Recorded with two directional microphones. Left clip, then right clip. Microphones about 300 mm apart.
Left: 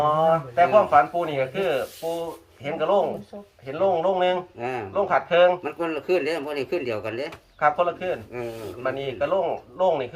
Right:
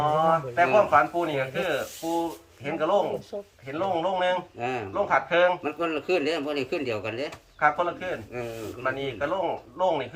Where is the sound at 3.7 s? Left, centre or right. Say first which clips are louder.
Left 5 dB; left.